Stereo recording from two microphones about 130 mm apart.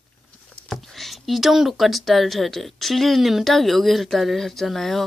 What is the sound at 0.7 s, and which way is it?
Speech, centre (ahead or behind).